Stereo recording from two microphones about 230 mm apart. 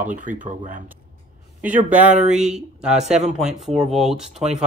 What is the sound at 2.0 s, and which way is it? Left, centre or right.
Speech, right.